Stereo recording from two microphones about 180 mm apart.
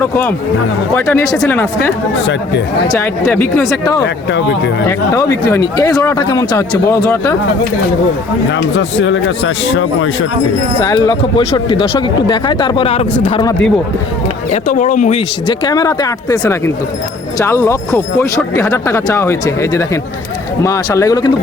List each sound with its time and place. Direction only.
0.0 s speech: 10° left (ahead or behind)
2.8 s speech: 15° left (ahead or behind)
4.0 s speech: 80° left
4.9 s speech: 15° left (ahead or behind)
8.4 s speech: 85° left
10.8 s speech: 20° left (ahead or behind)
13.3 s speech: 20° left (ahead or behind)
14.5 s speech: 45° left (ahead or behind)
15.4 s speech: 20° left (ahead or behind)